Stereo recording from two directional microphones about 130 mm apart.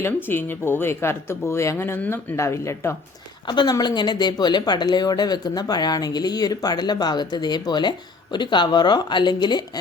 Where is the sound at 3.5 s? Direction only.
35° left (ahead or behind).